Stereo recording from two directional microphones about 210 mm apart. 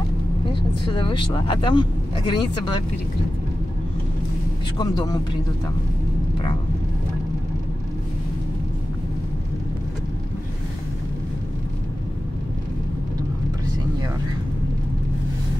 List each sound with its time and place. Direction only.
0.5 s speech: 25° left (ahead or behind)
4.7 s speech: 20° left (ahead or behind)